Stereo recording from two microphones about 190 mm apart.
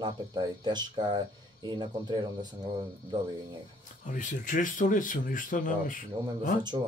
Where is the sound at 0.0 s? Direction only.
25° right (ahead or behind).